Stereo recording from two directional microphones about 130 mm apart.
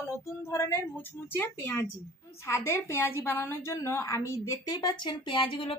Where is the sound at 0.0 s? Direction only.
20° left (ahead or behind).